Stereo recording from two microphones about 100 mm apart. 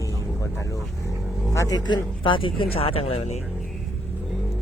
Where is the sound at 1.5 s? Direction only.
30° left (ahead or behind).